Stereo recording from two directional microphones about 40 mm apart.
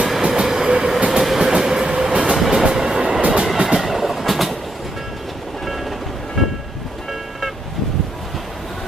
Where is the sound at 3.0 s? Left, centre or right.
Right.